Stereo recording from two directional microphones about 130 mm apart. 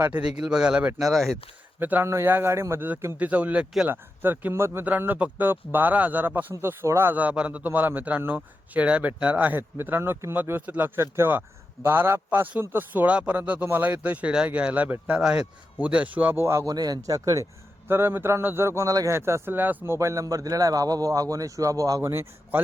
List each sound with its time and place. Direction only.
0.0 s speech: 10° right (ahead or behind)
1.8 s a man's voice: 15° right (ahead or behind)